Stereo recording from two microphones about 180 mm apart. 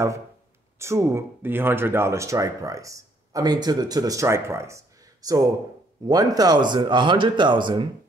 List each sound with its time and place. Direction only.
0.7 s speech: 15° right (ahead or behind)